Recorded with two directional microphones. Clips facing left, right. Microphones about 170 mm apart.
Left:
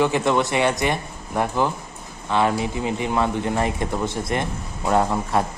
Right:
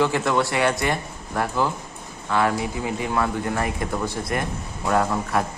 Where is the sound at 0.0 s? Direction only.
20° left (ahead or behind).